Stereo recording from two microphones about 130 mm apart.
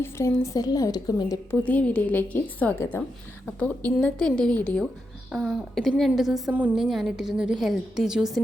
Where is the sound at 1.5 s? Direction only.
10° left (ahead or behind).